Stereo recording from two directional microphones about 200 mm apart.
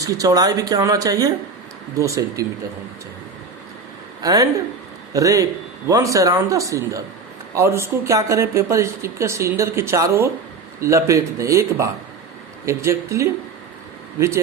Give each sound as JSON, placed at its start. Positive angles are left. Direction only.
{"t": 0.0, "sound": "speech", "side_deg": -15}
{"t": 4.2, "sound": "speech", "side_deg": -20}